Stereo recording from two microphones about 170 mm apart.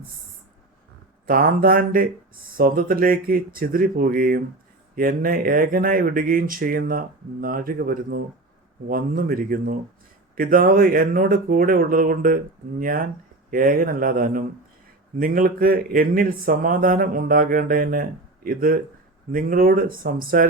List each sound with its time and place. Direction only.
1.3 s a man's voice: 55° right (ahead or behind)